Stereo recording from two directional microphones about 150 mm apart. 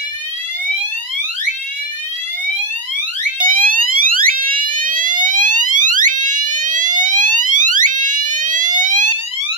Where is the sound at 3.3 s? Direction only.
65° right (ahead or behind).